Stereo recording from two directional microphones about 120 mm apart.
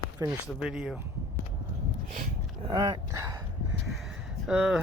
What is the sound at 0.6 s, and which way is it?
Speech, 5° right (ahead or behind).